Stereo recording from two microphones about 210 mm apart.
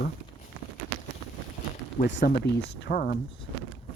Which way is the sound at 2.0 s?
50° left (ahead or behind).